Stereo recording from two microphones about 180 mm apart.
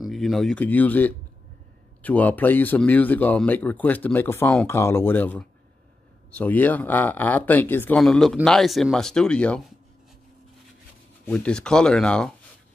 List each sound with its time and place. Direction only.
0.0 s speech: centre (ahead or behind)
11.2 s speech: 5° left (ahead or behind)